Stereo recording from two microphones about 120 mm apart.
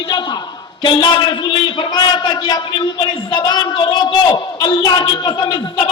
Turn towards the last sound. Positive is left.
turn(degrees=40)  # may be behind; listen again after turning